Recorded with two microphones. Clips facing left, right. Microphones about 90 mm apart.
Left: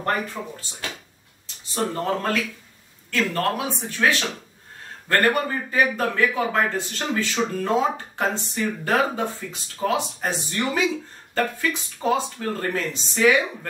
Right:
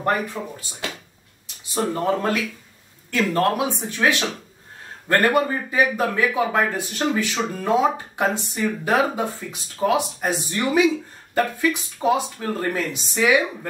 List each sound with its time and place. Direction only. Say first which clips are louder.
0.4 s speech: right 2 dB; 5° right (ahead or behind)
1.8 s speech: right 3 dB; 5° right (ahead or behind)